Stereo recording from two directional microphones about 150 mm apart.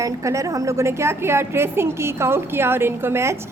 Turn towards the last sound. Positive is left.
turn(degrees=-15)  # may be behind; listen again after turning